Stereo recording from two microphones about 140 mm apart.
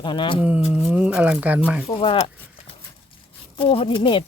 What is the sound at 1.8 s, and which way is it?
Speech, 40° left (ahead or behind).